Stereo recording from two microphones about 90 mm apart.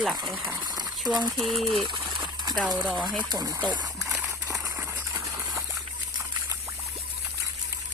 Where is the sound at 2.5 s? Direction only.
Centre (ahead or behind).